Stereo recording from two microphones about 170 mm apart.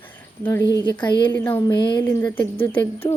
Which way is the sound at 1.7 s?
25° left (ahead or behind).